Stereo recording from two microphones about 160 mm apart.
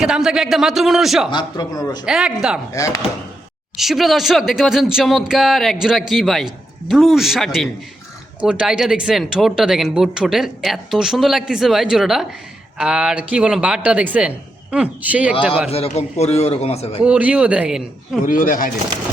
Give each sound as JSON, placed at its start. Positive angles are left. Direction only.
{"t": 0.0, "sound": "speech", "side_deg": -5}
{"t": 1.3, "sound": "speech", "side_deg": 25}
{"t": 2.0, "sound": "speech", "side_deg": -5}
{"t": 3.8, "sound": "a man's voice", "side_deg": 0}
{"t": 15.7, "sound": "a man's voice", "side_deg": 40}
{"t": 17.0, "sound": "a man's voice", "side_deg": -10}
{"t": 18.2, "sound": "speech", "side_deg": 60}